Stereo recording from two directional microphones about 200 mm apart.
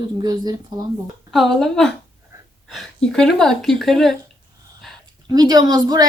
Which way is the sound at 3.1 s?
Centre (ahead or behind).